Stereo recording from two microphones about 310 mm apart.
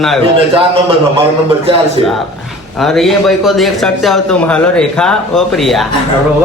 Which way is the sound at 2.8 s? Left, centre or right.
Centre.